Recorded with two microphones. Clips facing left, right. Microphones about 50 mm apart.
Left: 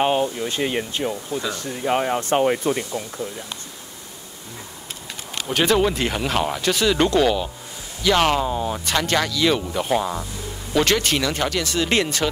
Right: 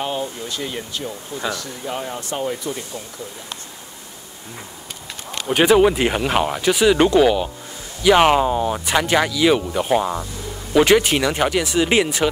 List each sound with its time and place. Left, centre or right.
0.0 s speech: left
5.5 s speech: centre